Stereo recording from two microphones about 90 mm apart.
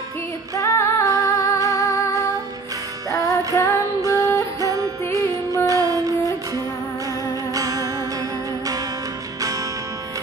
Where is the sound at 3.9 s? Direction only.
40° right (ahead or behind).